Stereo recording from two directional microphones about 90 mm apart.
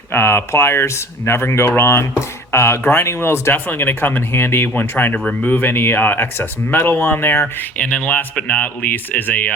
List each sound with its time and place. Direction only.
0.1 s speech: 25° left (ahead or behind)
7.8 s speech: 15° left (ahead or behind)